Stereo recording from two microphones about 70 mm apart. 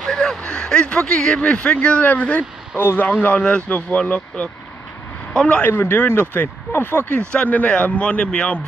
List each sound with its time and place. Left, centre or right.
0.0 s speech: centre
2.8 s speech: left
3.1 s a man's voice: left
5.6 s speech: left; by 8.5 s centre